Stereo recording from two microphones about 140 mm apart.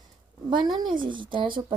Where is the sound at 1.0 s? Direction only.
35° right (ahead or behind).